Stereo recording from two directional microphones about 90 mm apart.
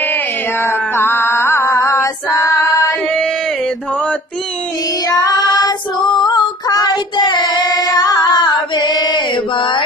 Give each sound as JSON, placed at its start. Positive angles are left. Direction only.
{"t": 0.0, "sound": "mantra", "side_deg": 20}
{"t": 5.0, "sound": "child singing", "side_deg": 45}
{"t": 9.3, "sound": "mantra", "side_deg": 70}